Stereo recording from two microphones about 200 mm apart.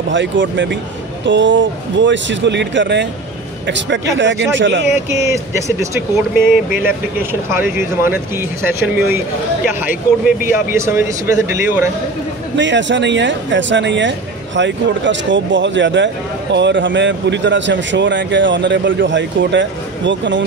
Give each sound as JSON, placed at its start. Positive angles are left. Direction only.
{"t": 0.1, "sound": "speech", "side_deg": -65}
{"t": 4.9, "sound": "speech", "side_deg": -15}
{"t": 8.8, "sound": "speech", "side_deg": -10}
{"t": 10.4, "sound": "speech", "side_deg": -10}
{"t": 12.5, "sound": "speech", "side_deg": -65}